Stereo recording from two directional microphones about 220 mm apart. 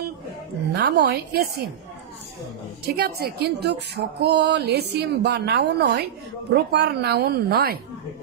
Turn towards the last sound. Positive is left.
turn(degrees=-45)  # may be behind; listen again after turning